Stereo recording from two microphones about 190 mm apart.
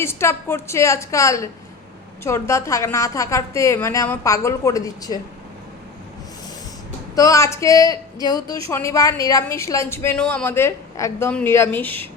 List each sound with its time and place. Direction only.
0.0 s a woman's voice: 15° left (ahead or behind)
7.2 s a woman's voice: 15° left (ahead or behind)